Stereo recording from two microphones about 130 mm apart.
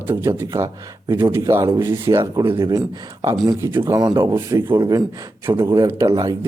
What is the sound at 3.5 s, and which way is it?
Speech, 20° right (ahead or behind).